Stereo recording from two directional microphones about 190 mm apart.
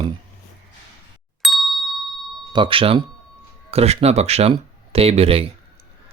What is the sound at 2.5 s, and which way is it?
Speech, 25° right (ahead or behind).